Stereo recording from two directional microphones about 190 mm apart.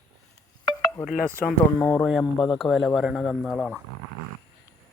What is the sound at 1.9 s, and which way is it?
Speech, centre (ahead or behind).